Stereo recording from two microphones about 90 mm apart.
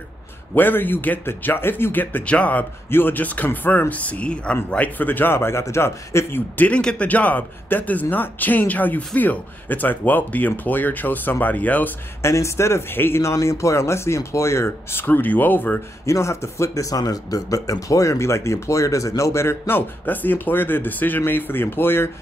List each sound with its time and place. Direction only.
0.6 s a man's voice: 20° left (ahead or behind)
12.2 s speech: 30° left (ahead or behind)
16.1 s speech: 35° left (ahead or behind)